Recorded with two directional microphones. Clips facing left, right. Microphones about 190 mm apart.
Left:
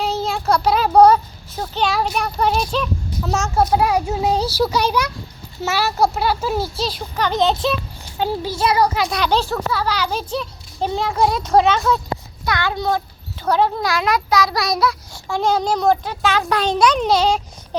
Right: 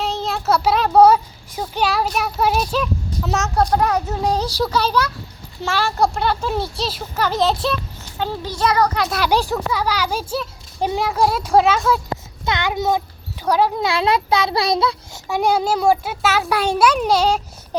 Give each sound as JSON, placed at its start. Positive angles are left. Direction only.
{"t": 0.0, "sound": "speech", "side_deg": 0}
{"t": 8.2, "sound": "speech", "side_deg": 10}
{"t": 9.0, "sound": "a child's voice", "side_deg": -5}
{"t": 12.5, "sound": "a child's voice", "side_deg": -20}
{"t": 13.8, "sound": "a child's voice", "side_deg": -30}
{"t": 15.3, "sound": "a child's voice", "side_deg": -10}